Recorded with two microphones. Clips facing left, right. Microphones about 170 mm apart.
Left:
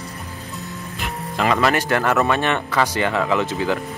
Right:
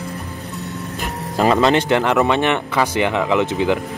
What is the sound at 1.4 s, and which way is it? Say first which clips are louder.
Speech: right 4 dB; 25° right (ahead or behind).